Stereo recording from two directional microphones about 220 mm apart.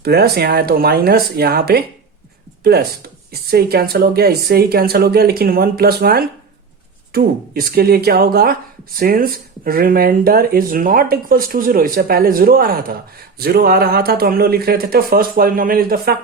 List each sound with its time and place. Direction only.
0.0 s speech: 45° right (ahead or behind)
3.3 s speech: 45° right (ahead or behind)